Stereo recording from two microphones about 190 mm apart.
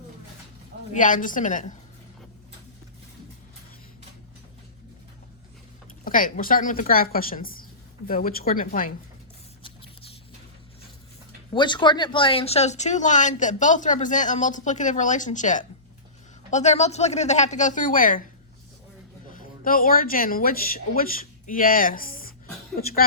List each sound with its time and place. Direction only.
0.9 s a woman's voice: 45° left (ahead or behind)
6.1 s a woman's voice: 45° left (ahead or behind)
9.6 s a sound: 30° left (ahead or behind)
11.5 s speech: 25° left (ahead or behind); by 18.2 s 45° left (ahead or behind)
19.3 s a woman's voice: 45° left (ahead or behind)